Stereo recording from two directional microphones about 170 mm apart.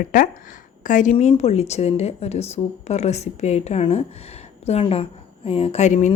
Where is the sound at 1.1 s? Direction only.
35° left (ahead or behind).